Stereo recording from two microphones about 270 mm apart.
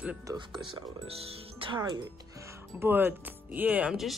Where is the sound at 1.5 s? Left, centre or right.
Centre.